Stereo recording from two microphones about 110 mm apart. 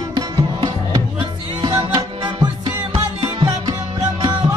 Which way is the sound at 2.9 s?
55° right (ahead or behind).